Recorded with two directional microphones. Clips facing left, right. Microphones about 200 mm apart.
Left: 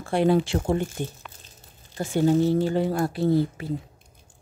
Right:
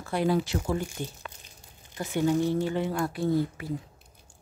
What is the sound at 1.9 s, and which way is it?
Speech, 30° left (ahead or behind).